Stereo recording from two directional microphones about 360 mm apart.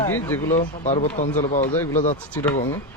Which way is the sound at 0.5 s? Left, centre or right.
Centre.